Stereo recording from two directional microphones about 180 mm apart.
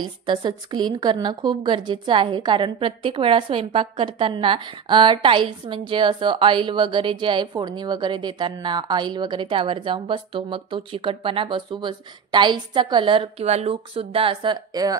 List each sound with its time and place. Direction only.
0.3 s a woman's voice: 25° right (ahead or behind)